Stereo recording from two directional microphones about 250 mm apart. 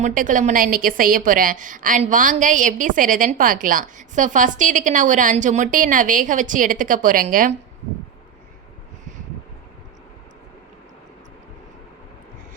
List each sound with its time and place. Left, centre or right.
0.0 s a woman's voice: right